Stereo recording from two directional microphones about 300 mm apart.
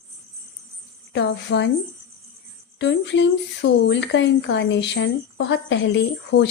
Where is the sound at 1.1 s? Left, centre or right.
Left.